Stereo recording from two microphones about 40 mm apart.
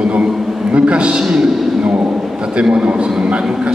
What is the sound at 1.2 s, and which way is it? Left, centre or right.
Speech, centre.